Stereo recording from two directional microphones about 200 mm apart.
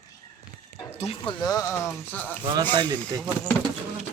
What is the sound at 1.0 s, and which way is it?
Speech, 30° left (ahead or behind).